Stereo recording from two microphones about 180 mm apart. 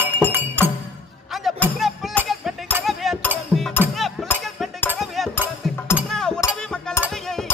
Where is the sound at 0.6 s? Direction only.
10° left (ahead or behind).